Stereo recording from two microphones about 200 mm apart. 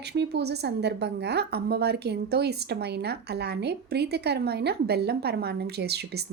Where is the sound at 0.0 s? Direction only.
55° right (ahead or behind).